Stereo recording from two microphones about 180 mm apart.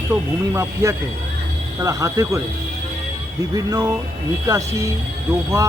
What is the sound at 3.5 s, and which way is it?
Speech, 20° right (ahead or behind).